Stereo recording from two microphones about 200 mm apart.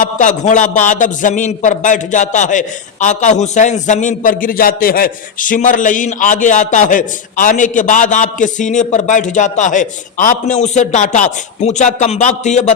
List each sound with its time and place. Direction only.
0.0 s a man's voice: 40° left (ahead or behind)